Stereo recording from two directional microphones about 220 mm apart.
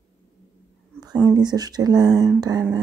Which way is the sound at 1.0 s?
20° right (ahead or behind).